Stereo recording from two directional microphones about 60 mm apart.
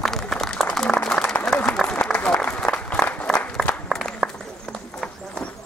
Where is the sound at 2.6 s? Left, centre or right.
Left.